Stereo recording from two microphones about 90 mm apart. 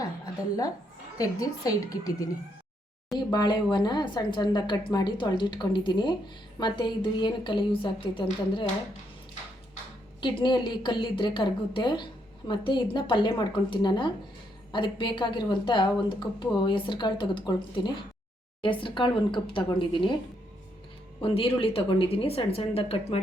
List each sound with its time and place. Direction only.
1.2 s a woman's voice: 40° left (ahead or behind)
3.3 s a woman's voice: 55° left (ahead or behind)
10.2 s a woman's voice: 60° left (ahead or behind)
18.6 s speech: 70° left (ahead or behind)
21.2 s a woman's voice: 85° left